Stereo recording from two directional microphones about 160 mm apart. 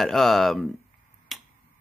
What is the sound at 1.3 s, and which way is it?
Finger snapping, centre (ahead or behind).